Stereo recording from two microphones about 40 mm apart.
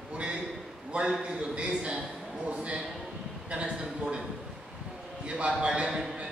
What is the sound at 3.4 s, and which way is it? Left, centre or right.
Speech, right.